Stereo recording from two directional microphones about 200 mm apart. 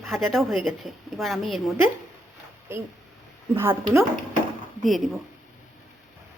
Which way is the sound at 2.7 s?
15° right (ahead or behind).